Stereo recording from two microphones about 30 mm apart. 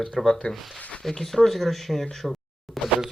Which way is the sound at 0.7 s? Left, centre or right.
Left.